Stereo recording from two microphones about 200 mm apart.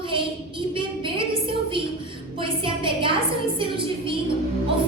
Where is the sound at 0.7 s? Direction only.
25° right (ahead or behind).